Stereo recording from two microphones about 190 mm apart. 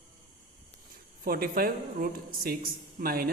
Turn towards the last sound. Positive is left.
turn(degrees=-50)  # may be behind; listen again after turning